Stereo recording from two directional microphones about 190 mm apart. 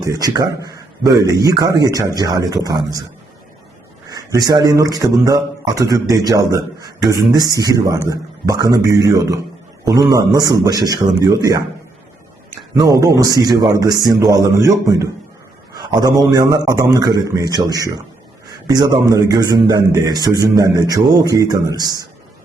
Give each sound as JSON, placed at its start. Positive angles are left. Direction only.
{"t": 0.0, "sound": "a man's voice", "side_deg": -20}
{"t": 4.1, "sound": "a man's voice", "side_deg": -20}
{"t": 12.8, "sound": "a man's voice", "side_deg": -20}